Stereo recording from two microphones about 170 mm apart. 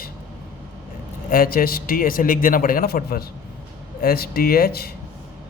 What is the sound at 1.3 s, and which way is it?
A man's voice, 60° left (ahead or behind).